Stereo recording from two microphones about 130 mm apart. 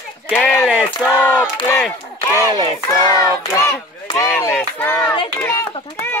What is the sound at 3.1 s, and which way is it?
Child singing, 25° left (ahead or behind).